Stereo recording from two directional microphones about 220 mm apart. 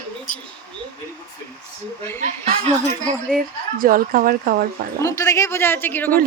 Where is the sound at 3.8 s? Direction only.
40° right (ahead or behind).